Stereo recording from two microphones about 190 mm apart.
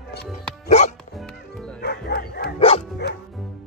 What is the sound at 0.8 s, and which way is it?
Music, 35° left (ahead or behind).